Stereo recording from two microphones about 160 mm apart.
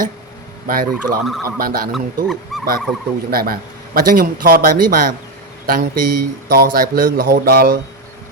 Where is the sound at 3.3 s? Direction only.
65° right (ahead or behind).